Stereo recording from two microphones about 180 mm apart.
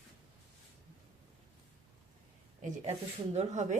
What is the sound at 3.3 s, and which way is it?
Speech, 40° right (ahead or behind).